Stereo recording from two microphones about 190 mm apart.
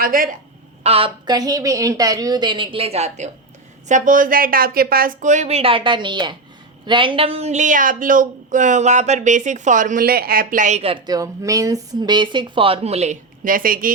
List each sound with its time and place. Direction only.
0.0 s speech: 45° right (ahead or behind)
0.8 s a woman's voice: 30° right (ahead or behind); by 13.9 s 45° right (ahead or behind)